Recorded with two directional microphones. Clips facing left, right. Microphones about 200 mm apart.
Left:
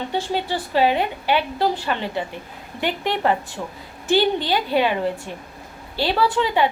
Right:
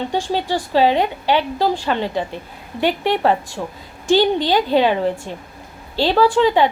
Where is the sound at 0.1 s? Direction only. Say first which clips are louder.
Right 3 dB; 15° right (ahead or behind).